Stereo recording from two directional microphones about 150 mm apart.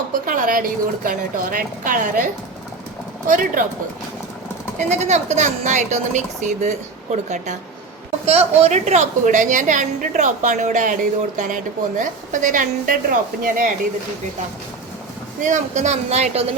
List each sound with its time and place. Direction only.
0.1 s a woman's voice: 65° right (ahead or behind)
4.8 s a woman's voice: 50° right (ahead or behind); by 13.7 s 65° right (ahead or behind)
15.4 s speech: 55° right (ahead or behind)